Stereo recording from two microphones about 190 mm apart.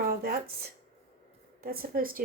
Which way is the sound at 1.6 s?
50° right (ahead or behind).